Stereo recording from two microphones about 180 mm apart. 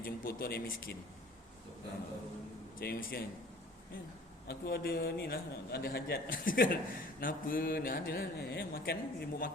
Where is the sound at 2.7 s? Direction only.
60° left (ahead or behind).